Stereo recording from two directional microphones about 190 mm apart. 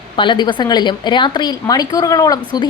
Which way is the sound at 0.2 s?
25° left (ahead or behind).